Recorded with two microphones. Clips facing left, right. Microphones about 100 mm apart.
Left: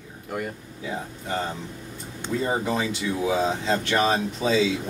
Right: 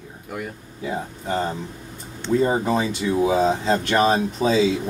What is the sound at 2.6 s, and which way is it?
Speech, 35° right (ahead or behind).